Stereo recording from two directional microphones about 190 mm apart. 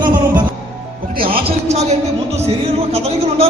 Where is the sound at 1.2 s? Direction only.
50° right (ahead or behind).